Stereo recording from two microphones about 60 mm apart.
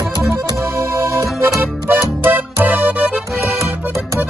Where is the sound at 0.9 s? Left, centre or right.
Right.